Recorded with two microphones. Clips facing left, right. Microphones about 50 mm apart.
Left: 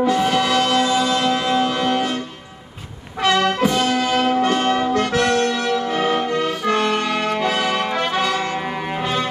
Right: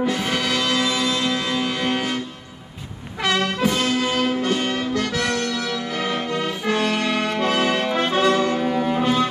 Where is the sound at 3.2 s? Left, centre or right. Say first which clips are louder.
Left 4 dB; left.